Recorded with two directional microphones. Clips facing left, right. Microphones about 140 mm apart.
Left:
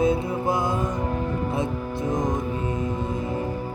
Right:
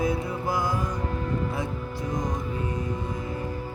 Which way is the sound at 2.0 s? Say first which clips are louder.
Left 5 dB; 25° left (ahead or behind).